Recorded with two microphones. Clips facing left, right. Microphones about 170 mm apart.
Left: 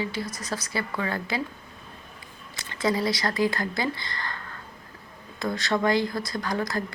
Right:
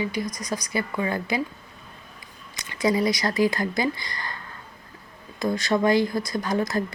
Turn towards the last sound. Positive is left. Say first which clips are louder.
# right 4 dB
turn(degrees=-20)  # may be behind; listen again after turning